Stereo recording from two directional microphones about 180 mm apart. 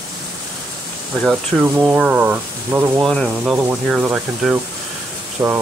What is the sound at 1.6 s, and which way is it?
Speech, 10° right (ahead or behind).